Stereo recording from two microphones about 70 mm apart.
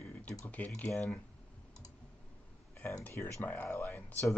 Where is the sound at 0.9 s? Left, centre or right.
Centre.